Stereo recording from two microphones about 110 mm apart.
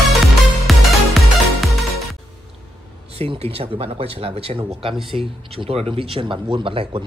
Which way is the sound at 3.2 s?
65° right (ahead or behind).